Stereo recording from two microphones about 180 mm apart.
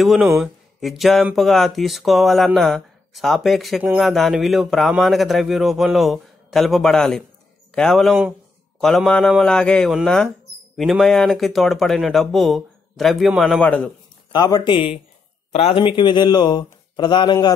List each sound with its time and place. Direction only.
0.0 s a man's voice: centre (ahead or behind)
14.3 s speech: 25° left (ahead or behind)